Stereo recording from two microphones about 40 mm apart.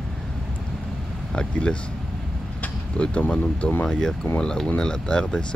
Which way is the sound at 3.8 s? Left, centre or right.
Centre.